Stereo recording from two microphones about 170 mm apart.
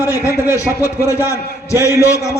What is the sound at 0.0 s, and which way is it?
Speech, 15° right (ahead or behind).